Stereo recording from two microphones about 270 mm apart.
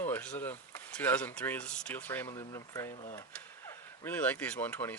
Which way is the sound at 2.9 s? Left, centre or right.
Left.